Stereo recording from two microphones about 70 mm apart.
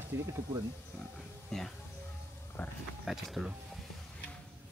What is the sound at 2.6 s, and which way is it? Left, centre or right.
Speech, left.